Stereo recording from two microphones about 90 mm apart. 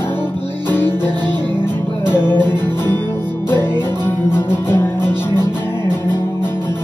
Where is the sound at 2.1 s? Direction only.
25° left (ahead or behind).